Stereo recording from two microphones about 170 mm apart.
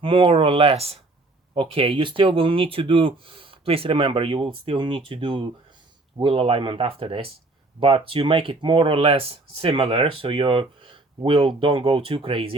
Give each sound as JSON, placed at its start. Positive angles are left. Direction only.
{"t": 0.0, "sound": "speech", "side_deg": -30}